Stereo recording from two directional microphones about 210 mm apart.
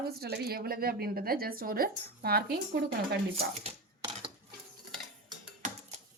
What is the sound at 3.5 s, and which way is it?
Typewriter, 30° right (ahead or behind).